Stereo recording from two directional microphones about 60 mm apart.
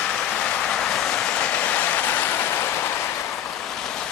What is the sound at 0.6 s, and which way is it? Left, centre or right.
Train, centre.